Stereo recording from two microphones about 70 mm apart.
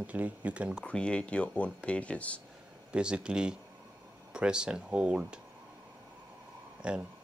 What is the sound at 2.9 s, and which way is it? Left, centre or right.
Speech, centre.